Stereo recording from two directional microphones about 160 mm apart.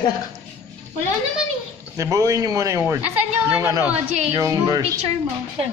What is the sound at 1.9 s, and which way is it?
A man's voice, 20° right (ahead or behind).